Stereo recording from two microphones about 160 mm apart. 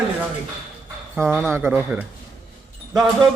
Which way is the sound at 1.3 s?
10° right (ahead or behind).